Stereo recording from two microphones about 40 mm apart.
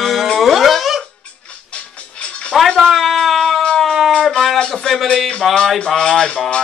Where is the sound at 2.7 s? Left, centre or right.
Centre.